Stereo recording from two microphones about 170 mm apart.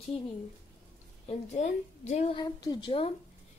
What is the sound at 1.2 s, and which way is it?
A woman's voice, 40° left (ahead or behind).